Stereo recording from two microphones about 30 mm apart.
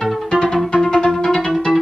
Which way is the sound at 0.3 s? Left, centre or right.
Left.